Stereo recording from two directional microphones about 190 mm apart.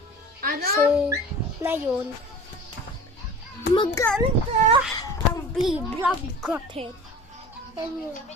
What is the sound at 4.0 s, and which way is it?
Speech, 5° left (ahead or behind).